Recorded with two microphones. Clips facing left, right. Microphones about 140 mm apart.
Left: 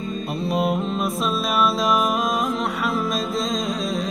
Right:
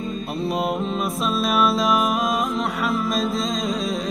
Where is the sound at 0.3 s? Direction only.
Centre (ahead or behind).